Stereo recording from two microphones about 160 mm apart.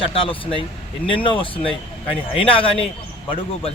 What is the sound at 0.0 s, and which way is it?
A man's voice, 35° left (ahead or behind).